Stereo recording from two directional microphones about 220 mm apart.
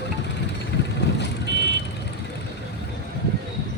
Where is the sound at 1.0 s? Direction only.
50° left (ahead or behind).